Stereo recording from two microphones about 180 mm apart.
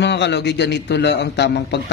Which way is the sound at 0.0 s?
70° left (ahead or behind).